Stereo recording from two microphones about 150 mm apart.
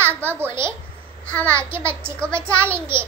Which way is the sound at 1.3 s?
10° left (ahead or behind).